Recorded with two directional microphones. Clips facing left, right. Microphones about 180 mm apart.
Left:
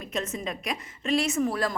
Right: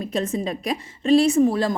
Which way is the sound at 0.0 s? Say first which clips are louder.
Right 7 dB; 30° right (ahead or behind).